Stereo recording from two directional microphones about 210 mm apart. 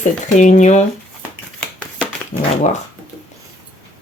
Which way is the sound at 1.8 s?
5° left (ahead or behind).